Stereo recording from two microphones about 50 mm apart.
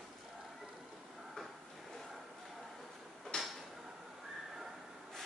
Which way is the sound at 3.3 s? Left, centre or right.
Centre.